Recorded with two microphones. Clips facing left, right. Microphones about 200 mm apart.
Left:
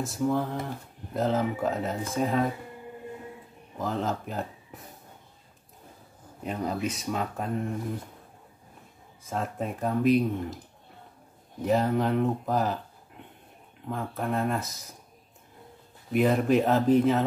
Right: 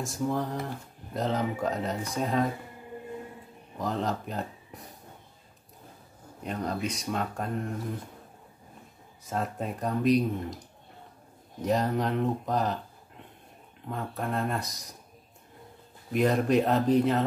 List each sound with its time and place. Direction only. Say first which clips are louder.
0.0 s speech: left 3 dB; centre (ahead or behind)
3.7 s speech: left 1 dB; centre (ahead or behind)
6.4 s speech: left 2 dB; 5° left (ahead or behind)
9.2 s speech: left 1 dB; centre (ahead or behind)
11.6 s speech: left 2 dB; 5° left (ahead or behind)
13.8 s speech: left 2 dB; centre (ahead or behind)
16.1 s speech: left 2 dB; 5° left (ahead or behind)